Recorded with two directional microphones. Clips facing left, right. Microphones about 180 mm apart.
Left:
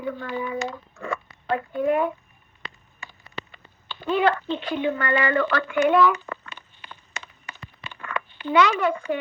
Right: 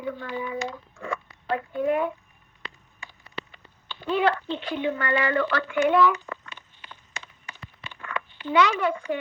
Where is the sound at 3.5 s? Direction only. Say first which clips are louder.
Left 2 dB; 55° left (ahead or behind).